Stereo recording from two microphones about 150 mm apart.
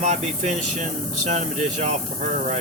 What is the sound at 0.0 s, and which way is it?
Speech, 45° right (ahead or behind).